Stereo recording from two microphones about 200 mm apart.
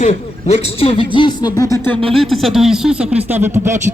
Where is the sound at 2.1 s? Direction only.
Centre (ahead or behind).